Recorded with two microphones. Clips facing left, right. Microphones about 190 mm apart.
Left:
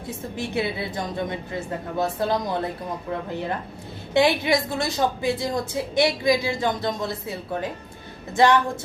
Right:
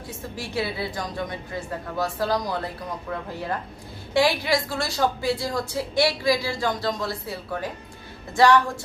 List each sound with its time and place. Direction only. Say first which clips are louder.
0.3 s a woman's voice: left 2 dB; 20° left (ahead or behind)
4.1 s a woman's voice: left 2 dB; 20° left (ahead or behind)